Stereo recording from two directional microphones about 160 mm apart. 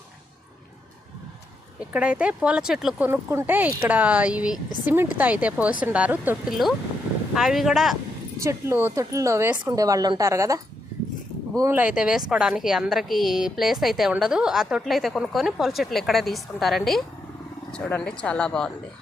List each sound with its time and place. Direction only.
1.8 s speech: 10° right (ahead or behind)
3.1 s a woman's voice: 15° right (ahead or behind)
8.4 s a woman's voice: 15° right (ahead or behind); by 18.7 s 5° left (ahead or behind)